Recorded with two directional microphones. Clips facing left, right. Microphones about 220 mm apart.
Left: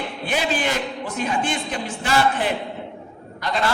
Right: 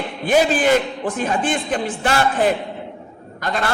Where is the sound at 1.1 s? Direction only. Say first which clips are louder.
Right 3 dB; 50° right (ahead or behind).